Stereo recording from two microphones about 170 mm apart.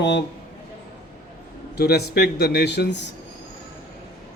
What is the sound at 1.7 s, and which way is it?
A man's voice, 70° left (ahead or behind).